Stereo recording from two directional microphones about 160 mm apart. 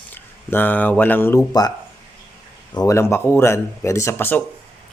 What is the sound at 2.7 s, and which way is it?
Speech, 20° left (ahead or behind).